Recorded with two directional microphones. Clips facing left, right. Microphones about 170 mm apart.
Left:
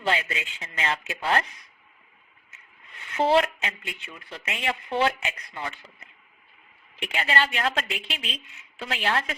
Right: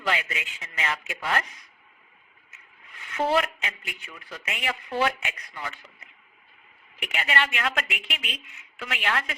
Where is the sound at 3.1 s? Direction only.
30° left (ahead or behind).